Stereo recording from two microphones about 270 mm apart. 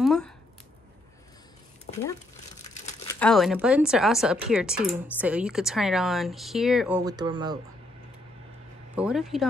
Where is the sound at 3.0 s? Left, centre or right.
Centre.